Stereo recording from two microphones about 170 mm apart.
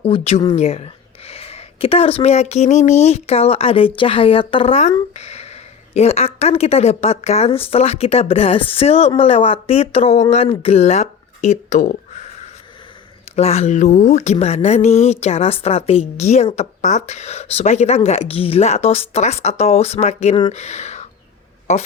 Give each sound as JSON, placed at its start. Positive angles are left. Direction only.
{"t": 0.0, "sound": "speech", "side_deg": 35}
{"t": 13.3, "sound": "speech", "side_deg": 40}